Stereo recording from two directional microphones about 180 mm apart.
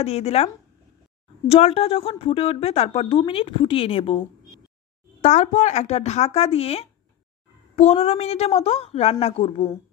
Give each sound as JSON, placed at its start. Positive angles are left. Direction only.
{"t": 0.0, "sound": "a woman's voice", "side_deg": 35}
{"t": 1.5, "sound": "a woman's voice", "side_deg": 35}
{"t": 5.2, "sound": "a woman's voice", "side_deg": 40}